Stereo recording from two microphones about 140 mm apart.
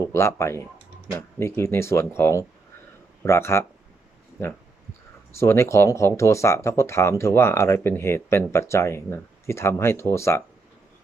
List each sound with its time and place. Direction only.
0.1 s speech: 20° left (ahead or behind)
5.4 s speech: 20° left (ahead or behind)